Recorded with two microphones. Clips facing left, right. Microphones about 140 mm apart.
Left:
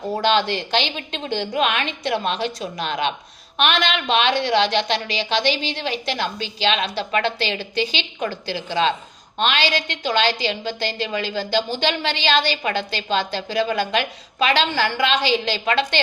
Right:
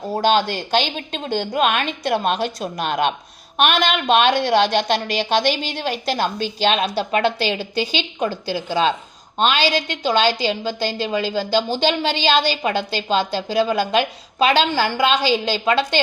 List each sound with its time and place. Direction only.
0.2 s a woman's voice: 45° right (ahead or behind)